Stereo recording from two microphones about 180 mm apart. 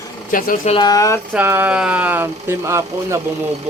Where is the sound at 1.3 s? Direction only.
10° right (ahead or behind).